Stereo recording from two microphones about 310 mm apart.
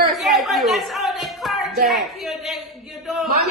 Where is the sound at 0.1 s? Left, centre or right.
Centre.